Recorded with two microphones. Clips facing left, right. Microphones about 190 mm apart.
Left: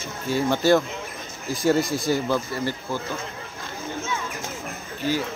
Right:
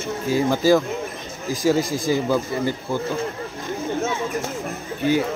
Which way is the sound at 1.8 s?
90° right.